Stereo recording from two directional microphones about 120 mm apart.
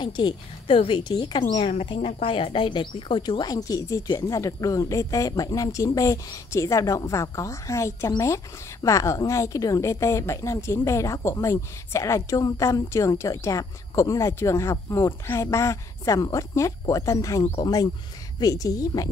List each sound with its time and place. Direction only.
0.0 s speech: 40° left (ahead or behind)
1.5 s a woman's voice: 50° left (ahead or behind); by 19.0 s 30° left (ahead or behind)